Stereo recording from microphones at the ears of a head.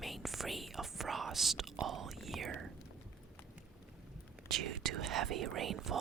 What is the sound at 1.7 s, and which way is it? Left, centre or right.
Speech, right.